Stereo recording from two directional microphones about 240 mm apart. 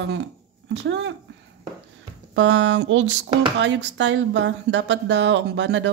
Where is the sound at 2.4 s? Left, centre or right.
Right.